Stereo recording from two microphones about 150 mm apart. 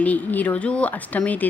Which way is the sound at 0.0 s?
10° left (ahead or behind).